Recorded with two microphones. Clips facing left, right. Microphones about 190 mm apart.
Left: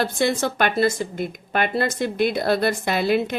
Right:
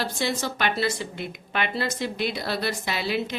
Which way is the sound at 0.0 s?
55° left (ahead or behind).